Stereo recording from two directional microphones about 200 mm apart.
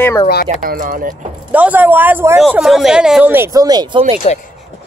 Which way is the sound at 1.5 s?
10° right (ahead or behind).